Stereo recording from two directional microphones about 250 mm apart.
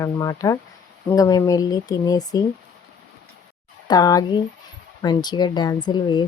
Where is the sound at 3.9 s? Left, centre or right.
Centre.